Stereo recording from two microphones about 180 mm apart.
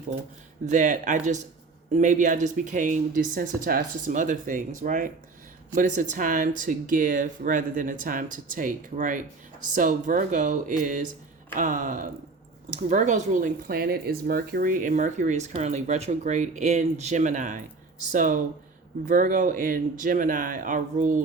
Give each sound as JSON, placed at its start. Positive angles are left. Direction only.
{"t": 0.7, "sound": "speech", "side_deg": -45}